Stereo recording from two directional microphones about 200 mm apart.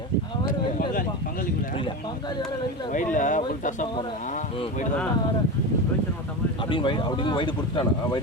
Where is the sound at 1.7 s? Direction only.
25° left (ahead or behind).